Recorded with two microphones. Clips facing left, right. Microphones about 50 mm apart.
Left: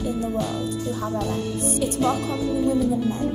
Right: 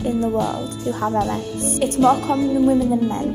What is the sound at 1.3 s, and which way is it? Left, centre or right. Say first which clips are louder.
Music: right 1 dB; right.